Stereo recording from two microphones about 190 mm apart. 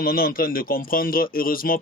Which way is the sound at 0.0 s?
50° left (ahead or behind).